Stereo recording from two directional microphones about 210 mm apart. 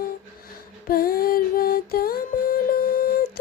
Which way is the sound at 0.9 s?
45° left (ahead or behind).